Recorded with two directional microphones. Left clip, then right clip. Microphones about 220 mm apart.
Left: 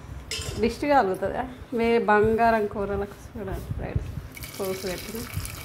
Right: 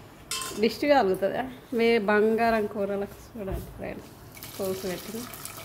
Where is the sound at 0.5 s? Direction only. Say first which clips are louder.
Left 1 dB; 25° right (ahead or behind).